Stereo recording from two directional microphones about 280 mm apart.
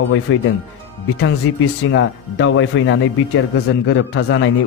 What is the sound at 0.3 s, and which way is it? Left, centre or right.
Speech, left.